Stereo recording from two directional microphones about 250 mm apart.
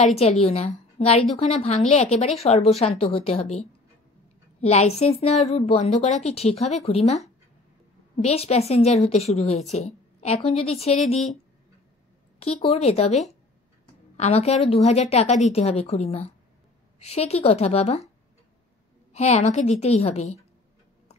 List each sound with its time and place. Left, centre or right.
0.0 s a woman's voice: left
12.5 s a woman's voice: left
19.1 s a woman's voice: left